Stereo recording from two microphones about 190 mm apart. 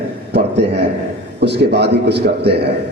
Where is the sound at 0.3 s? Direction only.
60° right (ahead or behind).